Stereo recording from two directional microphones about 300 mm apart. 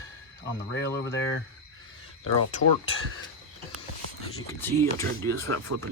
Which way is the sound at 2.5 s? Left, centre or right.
Left.